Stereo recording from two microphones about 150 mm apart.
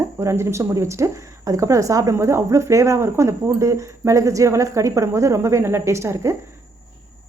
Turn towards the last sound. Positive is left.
turn(degrees=-20)  # may be behind; listen again after turning